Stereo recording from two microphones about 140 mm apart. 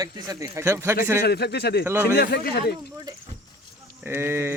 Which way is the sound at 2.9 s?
30° right (ahead or behind).